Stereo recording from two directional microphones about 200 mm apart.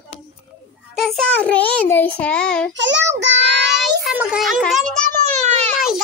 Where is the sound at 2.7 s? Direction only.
65° right (ahead or behind).